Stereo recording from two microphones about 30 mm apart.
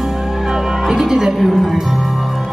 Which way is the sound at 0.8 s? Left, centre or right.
Centre.